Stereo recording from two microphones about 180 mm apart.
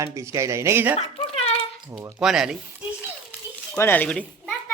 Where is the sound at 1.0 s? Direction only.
35° left (ahead or behind).